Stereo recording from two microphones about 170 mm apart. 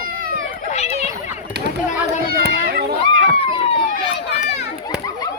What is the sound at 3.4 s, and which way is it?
Run, 35° left (ahead or behind).